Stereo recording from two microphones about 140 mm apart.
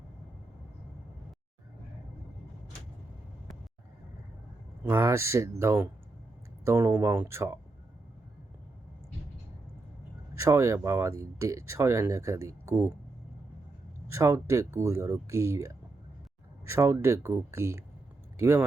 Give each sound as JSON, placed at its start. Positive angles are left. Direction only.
{"t": 4.9, "sound": "speech", "side_deg": -20}
{"t": 10.3, "sound": "speech", "side_deg": -20}
{"t": 14.1, "sound": "speech", "side_deg": -20}